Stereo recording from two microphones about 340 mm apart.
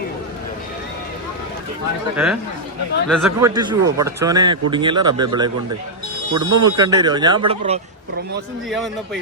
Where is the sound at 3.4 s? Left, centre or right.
Centre.